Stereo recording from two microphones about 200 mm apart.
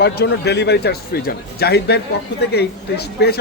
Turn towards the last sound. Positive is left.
turn(degrees=55)  # may be behind; listen again after turning